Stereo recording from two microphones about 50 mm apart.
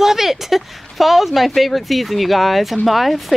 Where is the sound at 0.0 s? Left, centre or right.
Centre.